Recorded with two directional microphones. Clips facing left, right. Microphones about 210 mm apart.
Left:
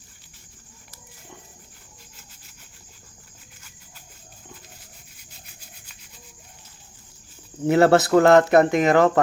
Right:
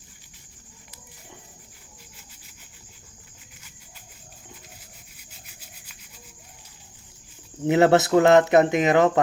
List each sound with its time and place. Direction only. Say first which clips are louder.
7.7 s speech: left 1 dB; 20° right (ahead or behind)